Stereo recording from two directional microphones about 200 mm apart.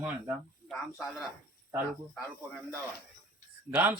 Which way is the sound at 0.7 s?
Centre (ahead or behind).